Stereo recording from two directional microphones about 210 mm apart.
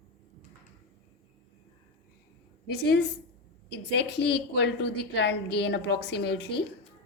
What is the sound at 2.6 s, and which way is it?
Speech, 55° left (ahead or behind).